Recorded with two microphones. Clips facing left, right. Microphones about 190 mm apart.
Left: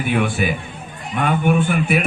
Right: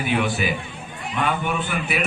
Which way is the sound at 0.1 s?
50° left (ahead or behind).